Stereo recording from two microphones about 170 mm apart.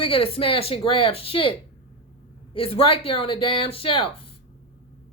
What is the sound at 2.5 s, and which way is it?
Speech, 30° left (ahead or behind).